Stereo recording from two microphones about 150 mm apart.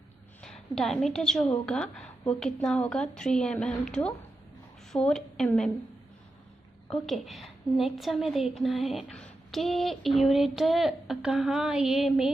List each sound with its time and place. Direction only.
0.4 s a woman's voice: 5° left (ahead or behind)
4.9 s a woman's voice: 5° left (ahead or behind)
6.9 s a woman's voice: centre (ahead or behind)